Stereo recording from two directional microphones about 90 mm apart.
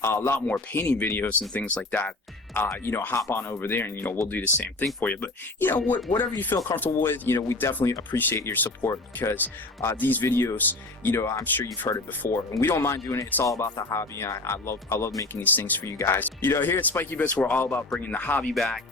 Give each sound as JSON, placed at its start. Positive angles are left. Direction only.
{"t": 0.0, "sound": "speech", "side_deg": 25}
{"t": 3.2, "sound": "speech", "side_deg": 35}
{"t": 15.4, "sound": "speech", "side_deg": 20}
{"t": 17.6, "sound": "speech", "side_deg": 25}
{"t": 18.5, "sound": "speech", "side_deg": 5}